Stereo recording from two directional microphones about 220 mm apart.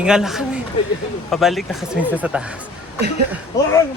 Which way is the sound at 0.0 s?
Centre (ahead or behind).